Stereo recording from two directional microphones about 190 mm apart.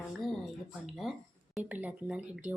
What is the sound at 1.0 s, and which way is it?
Speech, centre (ahead or behind).